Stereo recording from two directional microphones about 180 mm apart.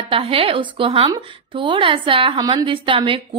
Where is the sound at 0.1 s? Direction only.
30° right (ahead or behind).